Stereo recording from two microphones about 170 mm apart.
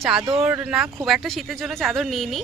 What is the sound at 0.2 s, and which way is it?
Speech, 25° right (ahead or behind).